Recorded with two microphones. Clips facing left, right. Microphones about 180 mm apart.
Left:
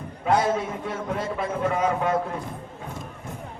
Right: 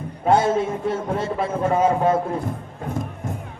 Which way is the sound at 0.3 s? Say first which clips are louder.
Right 4 dB; 25° right (ahead or behind).